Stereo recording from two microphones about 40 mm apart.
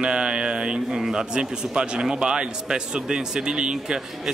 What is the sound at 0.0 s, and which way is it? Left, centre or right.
A man's voice, right.